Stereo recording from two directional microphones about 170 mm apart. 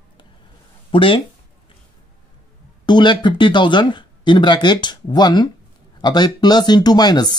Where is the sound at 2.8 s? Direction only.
25° left (ahead or behind).